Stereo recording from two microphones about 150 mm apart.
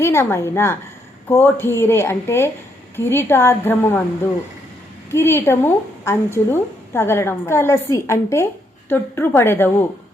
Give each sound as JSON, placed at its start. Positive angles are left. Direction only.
{"t": 0.0, "sound": "a woman's voice", "side_deg": 15}
{"t": 5.1, "sound": "a woman's voice", "side_deg": 15}